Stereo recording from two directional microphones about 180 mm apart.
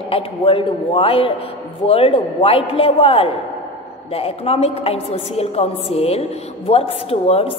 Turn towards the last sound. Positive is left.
turn(degrees=35)  # may be behind; listen again after turning